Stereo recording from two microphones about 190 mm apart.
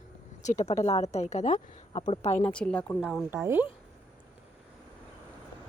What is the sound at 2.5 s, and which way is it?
Speech, 5° left (ahead or behind).